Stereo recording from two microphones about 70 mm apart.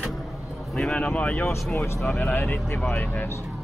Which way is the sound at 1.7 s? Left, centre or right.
Left.